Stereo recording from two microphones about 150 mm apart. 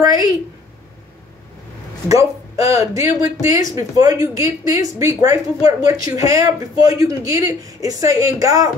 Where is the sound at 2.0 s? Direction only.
20° right (ahead or behind).